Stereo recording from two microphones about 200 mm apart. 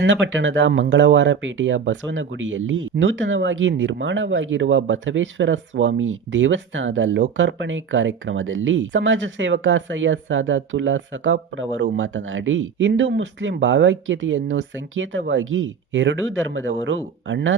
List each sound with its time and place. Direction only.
0.0 s speech: 70° right (ahead or behind)